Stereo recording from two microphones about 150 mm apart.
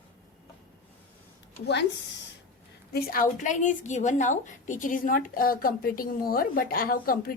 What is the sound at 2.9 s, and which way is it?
A woman's voice, 70° left (ahead or behind).